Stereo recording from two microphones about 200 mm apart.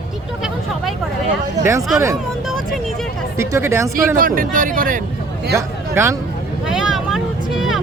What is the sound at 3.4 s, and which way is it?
Speech, 15° right (ahead or behind).